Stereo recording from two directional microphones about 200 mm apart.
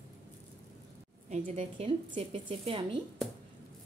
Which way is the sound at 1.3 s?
30° right (ahead or behind).